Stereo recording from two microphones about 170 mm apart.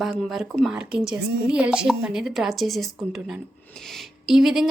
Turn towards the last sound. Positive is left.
turn(degrees=-5)  # may be behind; listen again after turning